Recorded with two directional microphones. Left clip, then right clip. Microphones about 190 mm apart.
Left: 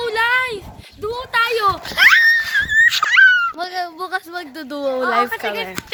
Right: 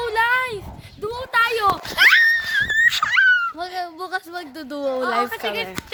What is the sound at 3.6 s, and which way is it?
Speech, 5° left (ahead or behind).